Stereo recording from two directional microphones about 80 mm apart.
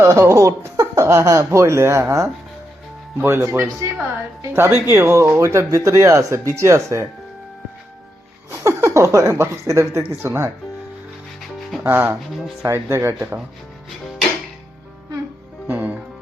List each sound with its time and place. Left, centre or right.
0.0 s speech: right
8.4 s speech: right
11.8 s speech: right
15.6 s music: right